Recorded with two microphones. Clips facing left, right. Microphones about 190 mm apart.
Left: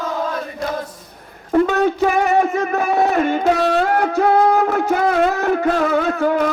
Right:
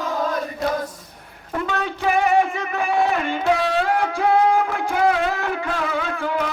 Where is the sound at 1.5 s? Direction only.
45° left (ahead or behind).